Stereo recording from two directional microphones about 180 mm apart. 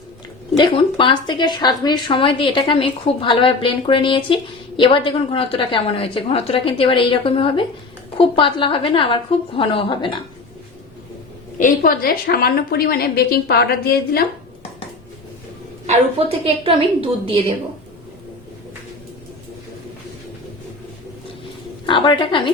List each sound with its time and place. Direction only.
0.6 s a woman's voice: 25° left (ahead or behind)
11.5 s a woman's voice: 50° left (ahead or behind)
15.9 s a woman's voice: 30° right (ahead or behind)
21.8 s a woman's voice: 25° left (ahead or behind)